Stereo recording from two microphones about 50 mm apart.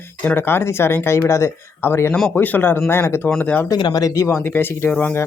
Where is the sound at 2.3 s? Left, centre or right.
Left.